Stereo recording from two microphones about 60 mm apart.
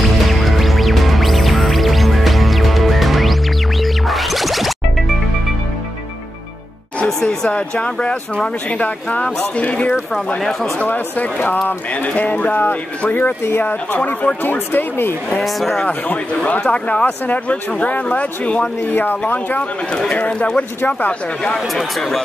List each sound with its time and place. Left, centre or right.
0.2 s music: centre
7.1 s a sound: centre
7.4 s speech: centre; by 13.7 s left
13.9 s speech: left
14.4 s speech: left
15.3 s speech: centre
15.8 s speech: left
18.9 s speech: left
21.5 s speech: centre